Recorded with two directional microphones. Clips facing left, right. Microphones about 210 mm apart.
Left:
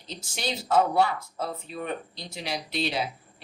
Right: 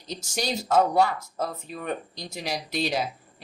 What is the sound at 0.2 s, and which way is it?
Speech, 45° right (ahead or behind).